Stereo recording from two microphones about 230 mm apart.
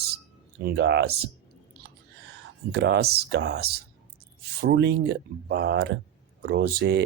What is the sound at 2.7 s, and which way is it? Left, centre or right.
Speech, right.